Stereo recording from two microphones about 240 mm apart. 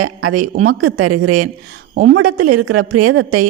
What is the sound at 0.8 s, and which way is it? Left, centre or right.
A woman's voice, right.